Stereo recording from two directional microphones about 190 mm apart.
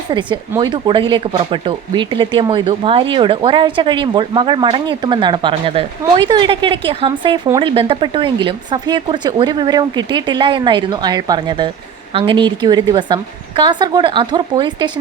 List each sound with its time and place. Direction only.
0.1 s speech: 25° right (ahead or behind)